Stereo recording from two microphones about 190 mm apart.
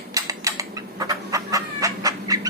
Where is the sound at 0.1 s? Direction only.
15° right (ahead or behind).